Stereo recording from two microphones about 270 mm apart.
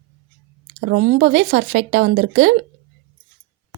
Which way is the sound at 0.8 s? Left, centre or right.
Right.